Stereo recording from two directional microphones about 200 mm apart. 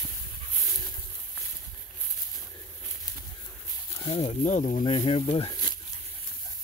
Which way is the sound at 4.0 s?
30° left (ahead or behind).